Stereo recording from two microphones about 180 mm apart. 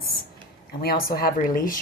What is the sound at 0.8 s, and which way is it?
Speech, 55° left (ahead or behind).